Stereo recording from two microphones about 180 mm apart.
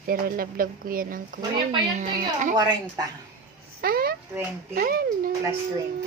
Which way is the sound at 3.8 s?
55° right (ahead or behind).